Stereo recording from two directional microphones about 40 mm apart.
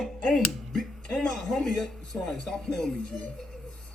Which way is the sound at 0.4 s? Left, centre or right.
Centre.